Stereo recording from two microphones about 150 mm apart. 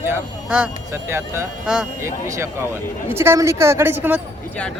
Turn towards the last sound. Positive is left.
turn(degrees=-15)  # may be behind; listen again after turning